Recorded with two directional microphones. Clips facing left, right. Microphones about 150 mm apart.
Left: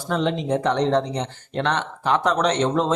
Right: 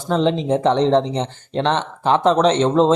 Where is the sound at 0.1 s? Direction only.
25° right (ahead or behind).